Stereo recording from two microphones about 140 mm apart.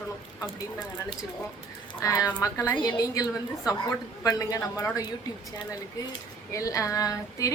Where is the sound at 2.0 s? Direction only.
25° left (ahead or behind).